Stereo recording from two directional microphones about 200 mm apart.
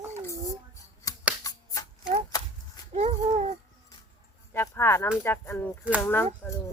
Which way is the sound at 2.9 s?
35° right (ahead or behind).